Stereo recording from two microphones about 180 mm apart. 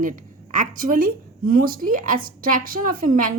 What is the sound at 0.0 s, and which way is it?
A woman's voice, 45° right (ahead or behind).